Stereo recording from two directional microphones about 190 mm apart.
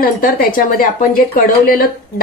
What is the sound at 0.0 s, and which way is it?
A woman's voice, 50° left (ahead or behind).